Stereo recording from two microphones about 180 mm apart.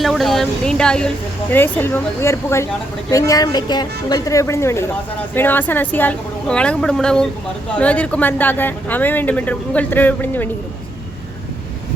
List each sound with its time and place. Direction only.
0.0 s speech: centre (ahead or behind)